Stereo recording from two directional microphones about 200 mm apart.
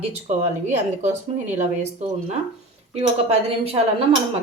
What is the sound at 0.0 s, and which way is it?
Speech, 35° right (ahead or behind).